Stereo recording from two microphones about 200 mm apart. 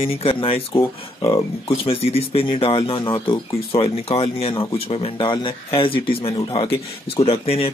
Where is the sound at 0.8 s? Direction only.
15° left (ahead or behind).